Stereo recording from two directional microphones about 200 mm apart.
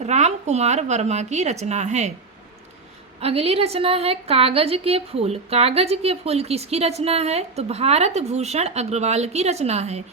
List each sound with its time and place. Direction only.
0.0 s a woman's voice: 35° right (ahead or behind)
3.2 s a woman's voice: 30° right (ahead or behind)